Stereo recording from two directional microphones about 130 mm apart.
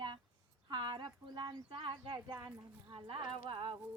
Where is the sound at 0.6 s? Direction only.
35° right (ahead or behind).